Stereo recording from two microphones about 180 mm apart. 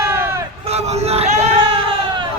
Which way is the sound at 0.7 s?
35° right (ahead or behind).